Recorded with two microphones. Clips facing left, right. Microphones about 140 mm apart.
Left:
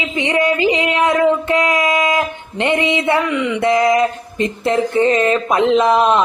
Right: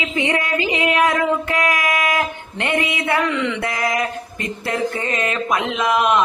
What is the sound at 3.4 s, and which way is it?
Speech, 15° left (ahead or behind).